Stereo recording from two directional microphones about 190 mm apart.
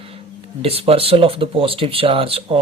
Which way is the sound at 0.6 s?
30° right (ahead or behind).